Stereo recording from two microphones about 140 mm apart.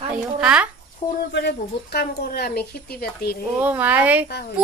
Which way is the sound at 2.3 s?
90° left.